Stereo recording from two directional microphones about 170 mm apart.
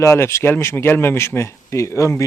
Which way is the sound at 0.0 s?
15° left (ahead or behind).